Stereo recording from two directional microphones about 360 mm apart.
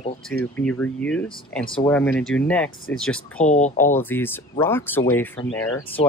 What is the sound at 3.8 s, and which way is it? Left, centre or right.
Speech, centre.